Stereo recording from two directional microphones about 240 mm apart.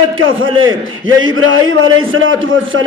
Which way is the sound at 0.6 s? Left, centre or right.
Right.